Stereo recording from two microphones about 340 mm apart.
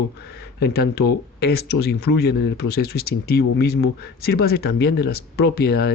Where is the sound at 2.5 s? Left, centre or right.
Left.